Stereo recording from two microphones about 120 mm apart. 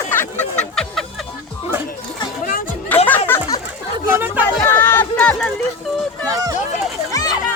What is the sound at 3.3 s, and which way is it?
Chatter, 20° left (ahead or behind).